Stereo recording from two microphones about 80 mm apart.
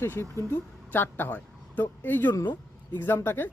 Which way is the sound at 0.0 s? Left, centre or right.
Left.